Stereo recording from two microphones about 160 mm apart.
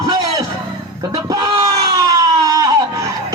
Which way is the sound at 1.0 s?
20° right (ahead or behind).